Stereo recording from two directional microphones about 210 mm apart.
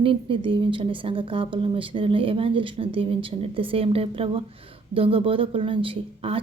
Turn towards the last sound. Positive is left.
turn(degrees=-25)  # may be behind; listen again after turning